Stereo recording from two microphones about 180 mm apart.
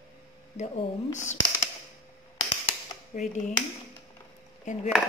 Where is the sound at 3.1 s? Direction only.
45° left (ahead or behind).